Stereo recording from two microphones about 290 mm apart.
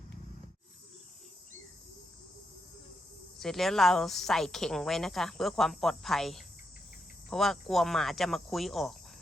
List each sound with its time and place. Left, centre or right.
3.3 s speech: centre